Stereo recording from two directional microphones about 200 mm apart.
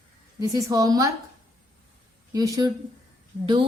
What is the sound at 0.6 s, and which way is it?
Speech, 15° right (ahead or behind).